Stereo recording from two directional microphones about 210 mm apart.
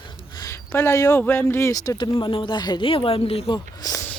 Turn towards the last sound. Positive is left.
turn(degrees=15)  # may be behind; listen again after turning